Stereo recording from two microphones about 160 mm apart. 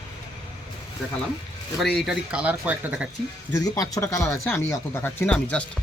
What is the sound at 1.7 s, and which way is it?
Speech, centre (ahead or behind).